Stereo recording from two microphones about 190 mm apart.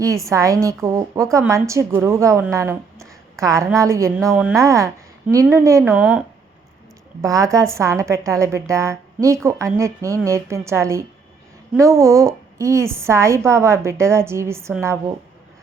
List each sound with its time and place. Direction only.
0.3 s a woman's voice: 15° right (ahead or behind)
5.8 s speech: centre (ahead or behind)
7.2 s a woman's voice: 15° right (ahead or behind)